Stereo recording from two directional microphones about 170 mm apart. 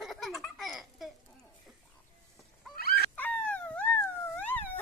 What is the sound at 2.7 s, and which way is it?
Chicken, 65° left (ahead or behind).